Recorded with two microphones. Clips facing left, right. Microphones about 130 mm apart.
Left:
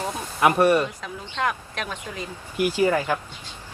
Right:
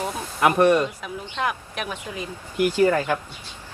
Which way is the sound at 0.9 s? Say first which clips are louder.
Right 2 dB; 15° right (ahead or behind).